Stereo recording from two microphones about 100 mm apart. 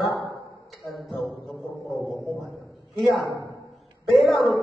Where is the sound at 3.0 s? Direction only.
Centre (ahead or behind).